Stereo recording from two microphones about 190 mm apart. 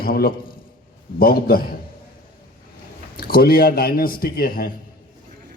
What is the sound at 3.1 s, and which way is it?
A man's voice, 55° left (ahead or behind).